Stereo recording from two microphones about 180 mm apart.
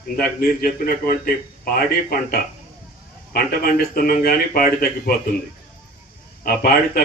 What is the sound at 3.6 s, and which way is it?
Speech, 55° left (ahead or behind).